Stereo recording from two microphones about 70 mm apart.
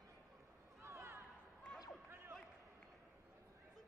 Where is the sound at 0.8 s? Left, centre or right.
Right.